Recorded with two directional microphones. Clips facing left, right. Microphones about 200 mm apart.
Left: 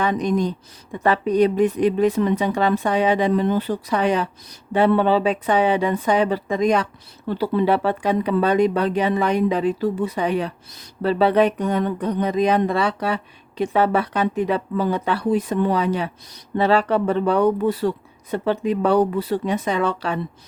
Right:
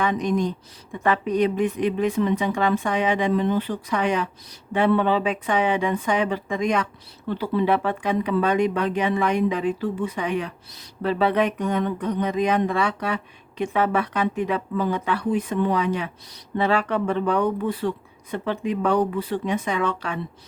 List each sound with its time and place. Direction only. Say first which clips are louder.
0.0 s speech: left 2 dB; 35° left (ahead or behind)